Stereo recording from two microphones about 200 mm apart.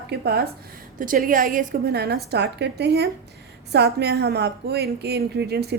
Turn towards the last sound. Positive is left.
turn(degrees=-55)  # may be behind; listen again after turning